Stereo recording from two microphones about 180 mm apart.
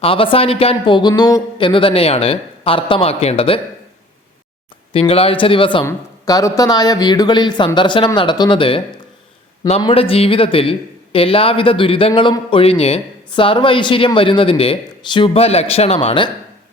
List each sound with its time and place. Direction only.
0.0 s speech: 30° left (ahead or behind)
4.9 s speech: 30° left (ahead or behind)
5.8 s speech: 20° left (ahead or behind)